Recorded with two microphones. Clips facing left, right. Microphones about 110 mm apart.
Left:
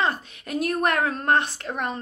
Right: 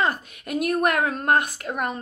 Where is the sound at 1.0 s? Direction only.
45° right (ahead or behind).